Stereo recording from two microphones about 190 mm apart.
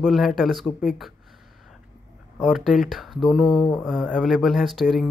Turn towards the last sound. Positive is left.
turn(degrees=0)  # may be behind; listen again after turning